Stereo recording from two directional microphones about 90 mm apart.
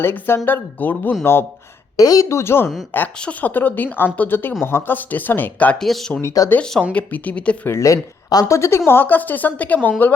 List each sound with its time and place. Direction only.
0.0 s a woman's voice: 25° left (ahead or behind)
2.0 s speech: 40° left (ahead or behind)
2.4 s a woman's voice: 25° left (ahead or behind)
5.8 s speech: 5° left (ahead or behind)
6.2 s speech: 40° left (ahead or behind)
6.9 s speech: 15° left (ahead or behind)
7.7 s speech: 35° left (ahead or behind)
8.9 s a woman's voice: 25° left (ahead or behind)